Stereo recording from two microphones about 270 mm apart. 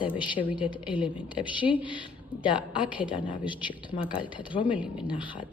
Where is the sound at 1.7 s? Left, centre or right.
Centre.